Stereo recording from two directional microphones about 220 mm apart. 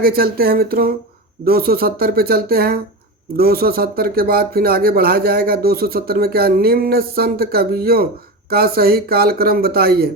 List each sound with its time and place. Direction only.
0.0 s speech: 45° right (ahead or behind)